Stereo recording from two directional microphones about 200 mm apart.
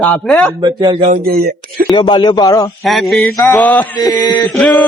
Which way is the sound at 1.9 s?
25° left (ahead or behind).